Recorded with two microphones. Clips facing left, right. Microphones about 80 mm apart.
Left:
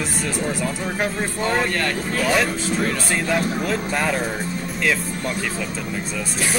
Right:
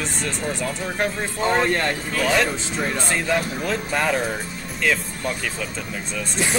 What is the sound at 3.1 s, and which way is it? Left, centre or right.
Speech, centre.